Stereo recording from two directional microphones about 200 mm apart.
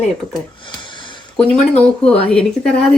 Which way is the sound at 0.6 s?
25° left (ahead or behind).